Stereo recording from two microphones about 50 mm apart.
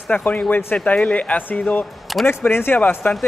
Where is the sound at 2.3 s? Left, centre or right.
Left.